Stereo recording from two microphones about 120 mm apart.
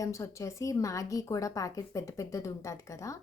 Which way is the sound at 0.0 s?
25° left (ahead or behind).